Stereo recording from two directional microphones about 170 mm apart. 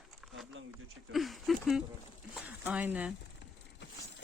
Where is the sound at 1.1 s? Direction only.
Centre (ahead or behind).